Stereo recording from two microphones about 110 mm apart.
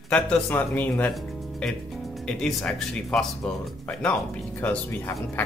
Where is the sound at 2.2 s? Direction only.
5° left (ahead or behind).